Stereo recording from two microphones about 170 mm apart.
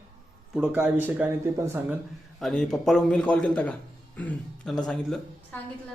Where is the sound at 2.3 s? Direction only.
Centre (ahead or behind).